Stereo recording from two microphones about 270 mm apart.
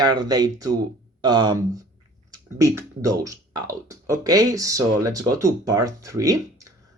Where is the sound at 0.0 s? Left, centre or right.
Centre.